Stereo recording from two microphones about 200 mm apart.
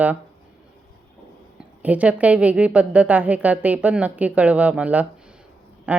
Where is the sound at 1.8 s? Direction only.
5° right (ahead or behind).